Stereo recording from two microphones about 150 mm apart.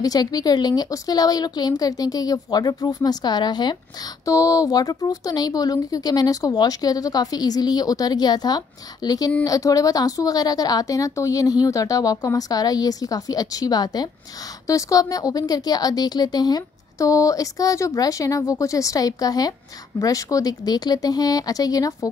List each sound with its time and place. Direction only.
0.0 s a woman's voice: 25° left (ahead or behind)